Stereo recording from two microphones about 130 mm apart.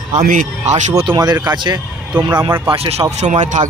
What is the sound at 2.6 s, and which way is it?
Speech, 50° right (ahead or behind).